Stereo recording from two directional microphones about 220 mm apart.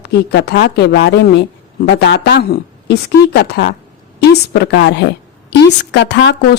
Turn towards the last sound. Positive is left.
turn(degrees=55)  # may be behind; listen again after turning